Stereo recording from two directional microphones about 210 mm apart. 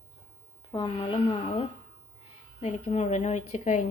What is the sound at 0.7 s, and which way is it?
A woman's voice, 25° left (ahead or behind).